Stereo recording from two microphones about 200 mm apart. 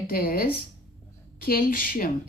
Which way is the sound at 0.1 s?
45° left (ahead or behind).